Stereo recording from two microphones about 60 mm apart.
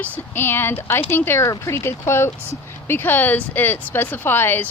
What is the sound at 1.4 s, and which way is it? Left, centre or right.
Speech, left.